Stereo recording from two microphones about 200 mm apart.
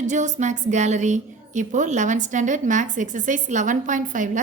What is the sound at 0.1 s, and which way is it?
A woman's voice, 35° right (ahead or behind).